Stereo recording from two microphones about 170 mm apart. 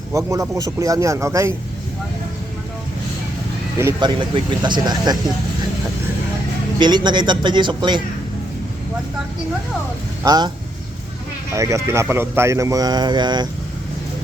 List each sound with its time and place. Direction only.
0.1 s a man's voice: 20° right (ahead or behind)
4.0 s speech: 25° right (ahead or behind)
6.7 s speech: 25° right (ahead or behind)
10.2 s speech: 25° right (ahead or behind)
11.5 s speech: 20° right (ahead or behind)